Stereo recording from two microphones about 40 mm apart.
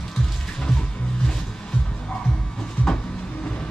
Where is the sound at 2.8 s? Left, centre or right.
Left.